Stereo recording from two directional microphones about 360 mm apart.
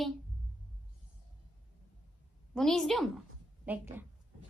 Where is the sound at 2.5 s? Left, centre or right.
Centre.